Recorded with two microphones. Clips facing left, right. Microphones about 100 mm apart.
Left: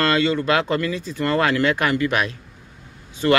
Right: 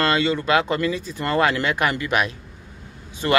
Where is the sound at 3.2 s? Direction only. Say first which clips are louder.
Left 2 dB; 20° right (ahead or behind).